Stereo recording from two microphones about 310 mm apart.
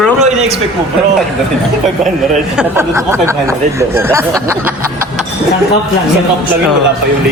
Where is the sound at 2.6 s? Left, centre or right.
Centre.